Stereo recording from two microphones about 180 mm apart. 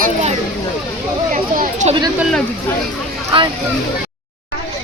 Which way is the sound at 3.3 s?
30° right (ahead or behind).